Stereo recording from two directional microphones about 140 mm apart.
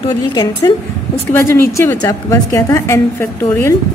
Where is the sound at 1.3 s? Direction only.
15° left (ahead or behind).